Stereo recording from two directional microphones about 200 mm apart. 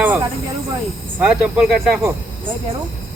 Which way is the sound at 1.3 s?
5° right (ahead or behind).